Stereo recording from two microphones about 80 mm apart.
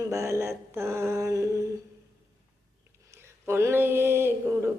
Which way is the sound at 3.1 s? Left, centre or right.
Right.